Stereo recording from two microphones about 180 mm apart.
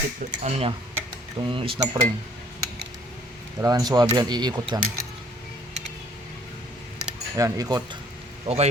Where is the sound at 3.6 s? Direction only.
20° right (ahead or behind).